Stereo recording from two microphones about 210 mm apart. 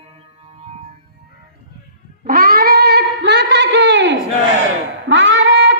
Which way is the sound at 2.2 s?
45° right (ahead or behind).